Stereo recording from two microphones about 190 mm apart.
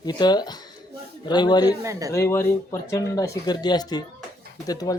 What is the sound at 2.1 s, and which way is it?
Speech, 15° left (ahead or behind).